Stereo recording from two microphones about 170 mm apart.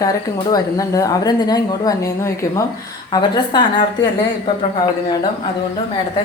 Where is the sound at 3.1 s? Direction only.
25° left (ahead or behind).